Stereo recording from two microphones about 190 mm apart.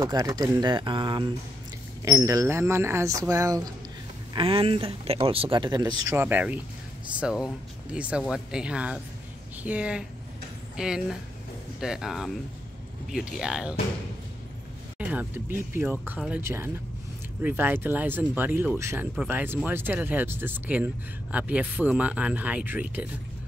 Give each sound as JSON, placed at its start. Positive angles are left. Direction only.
{"t": 0.0, "sound": "speech", "side_deg": -20}
{"t": 6.1, "sound": "speech", "side_deg": -10}
{"t": 15.0, "sound": "speech", "side_deg": -10}